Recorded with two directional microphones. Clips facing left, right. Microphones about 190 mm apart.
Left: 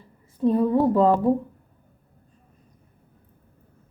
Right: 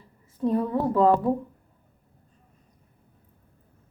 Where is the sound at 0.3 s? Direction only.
25° left (ahead or behind).